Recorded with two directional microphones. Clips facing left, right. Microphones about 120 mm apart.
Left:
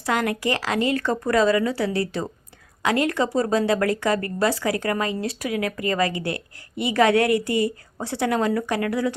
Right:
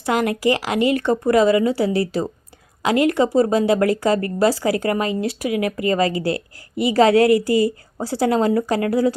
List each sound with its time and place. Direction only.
0.0 s speech: 25° right (ahead or behind)